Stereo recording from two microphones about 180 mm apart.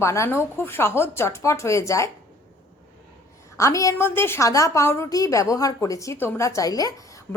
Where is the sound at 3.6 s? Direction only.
15° left (ahead or behind).